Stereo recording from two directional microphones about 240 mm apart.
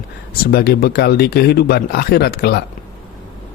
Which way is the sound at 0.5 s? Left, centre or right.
Left.